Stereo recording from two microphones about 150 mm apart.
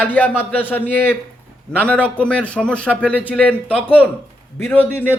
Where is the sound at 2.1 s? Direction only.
10° left (ahead or behind).